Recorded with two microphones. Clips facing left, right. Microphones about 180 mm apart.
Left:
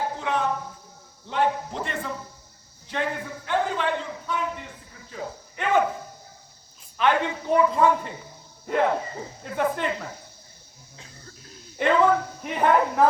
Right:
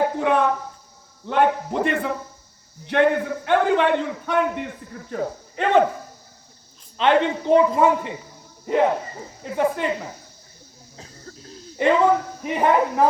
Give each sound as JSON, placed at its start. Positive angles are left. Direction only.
{"t": 0.0, "sound": "a sound", "side_deg": -60}
{"t": 1.3, "sound": "a man's voice", "side_deg": -60}
{"t": 5.5, "sound": "speech", "side_deg": -30}
{"t": 6.9, "sound": "a woman's voice", "side_deg": -25}
{"t": 10.9, "sound": "cough", "side_deg": -35}
{"t": 11.8, "sound": "speech", "side_deg": -15}